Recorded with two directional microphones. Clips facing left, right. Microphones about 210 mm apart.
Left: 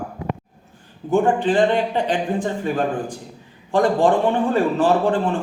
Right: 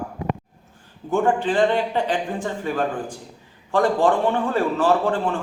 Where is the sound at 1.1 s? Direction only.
20° left (ahead or behind).